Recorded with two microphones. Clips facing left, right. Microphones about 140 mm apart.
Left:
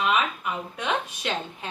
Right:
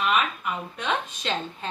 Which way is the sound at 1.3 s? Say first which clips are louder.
Right 1 dB; 10° left (ahead or behind).